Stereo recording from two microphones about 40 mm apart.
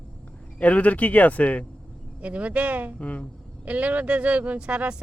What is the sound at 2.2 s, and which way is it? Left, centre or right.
Speech, right.